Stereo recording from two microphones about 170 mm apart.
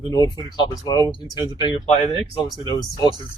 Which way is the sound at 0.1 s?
25° left (ahead or behind).